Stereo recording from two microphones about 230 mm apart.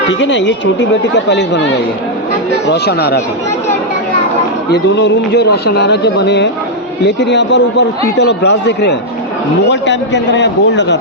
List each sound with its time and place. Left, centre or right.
0.1 s a man's voice: left
4.7 s a man's voice: left